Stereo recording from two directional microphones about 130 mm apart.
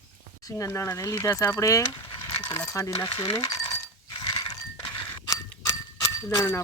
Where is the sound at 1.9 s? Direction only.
35° left (ahead or behind).